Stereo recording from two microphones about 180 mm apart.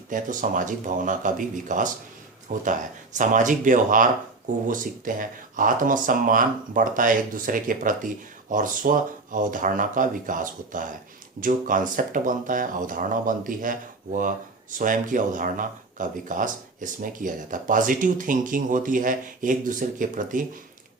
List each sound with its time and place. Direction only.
0.1 s speech: 45° right (ahead or behind)